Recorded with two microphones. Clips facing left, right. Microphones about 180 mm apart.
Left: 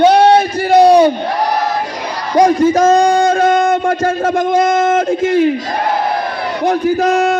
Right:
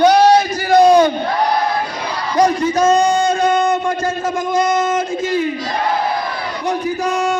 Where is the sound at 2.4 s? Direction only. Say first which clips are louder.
Left 4 dB; 50° left (ahead or behind).